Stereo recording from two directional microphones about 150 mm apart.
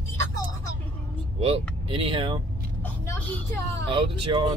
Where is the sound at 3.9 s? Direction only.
35° right (ahead or behind).